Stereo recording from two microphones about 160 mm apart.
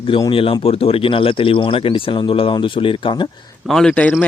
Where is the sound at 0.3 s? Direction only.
35° left (ahead or behind).